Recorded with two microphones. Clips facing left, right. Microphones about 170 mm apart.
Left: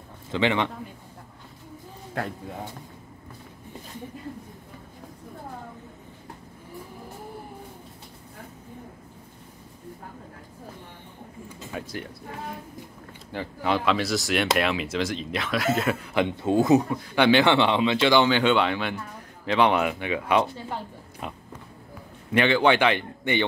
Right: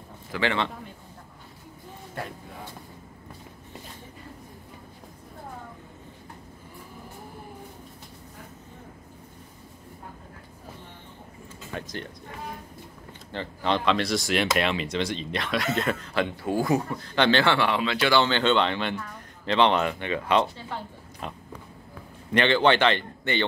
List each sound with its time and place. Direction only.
0.3 s speech: 15° left (ahead or behind)
11.4 s a sound: 10° left (ahead or behind)
13.3 s speech: 10° left (ahead or behind)
16.9 s speech: 10° left (ahead or behind)
18.2 s speech: 10° left (ahead or behind)